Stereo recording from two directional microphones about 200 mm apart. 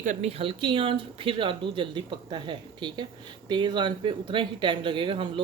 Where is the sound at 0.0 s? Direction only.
35° right (ahead or behind).